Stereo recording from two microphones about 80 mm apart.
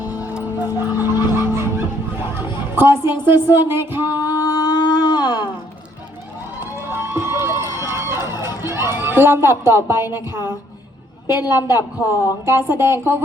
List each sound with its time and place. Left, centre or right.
0.0 s music: left
0.8 s music: right
2.7 s a woman's voice: right
4.2 s a sound: left
6.6 s a sound: right
8.7 s a man's voice: right
11.3 s a woman's voice: left
12.0 s speech: right